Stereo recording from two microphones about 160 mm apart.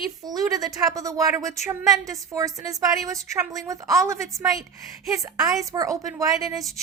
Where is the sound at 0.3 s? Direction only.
25° right (ahead or behind).